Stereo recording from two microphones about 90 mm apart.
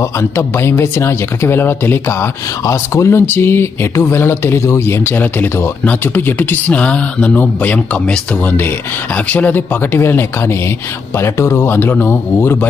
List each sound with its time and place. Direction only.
0.2 s speech: 30° left (ahead or behind)